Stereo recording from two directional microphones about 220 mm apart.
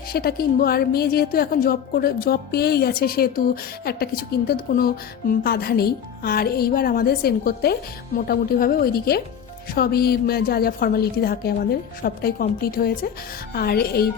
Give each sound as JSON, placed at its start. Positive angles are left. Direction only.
{"t": 0.1, "sound": "a woman's voice", "side_deg": 45}